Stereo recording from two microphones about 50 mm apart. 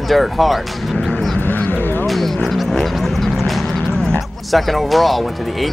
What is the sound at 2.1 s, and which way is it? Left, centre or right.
Vehicle, centre.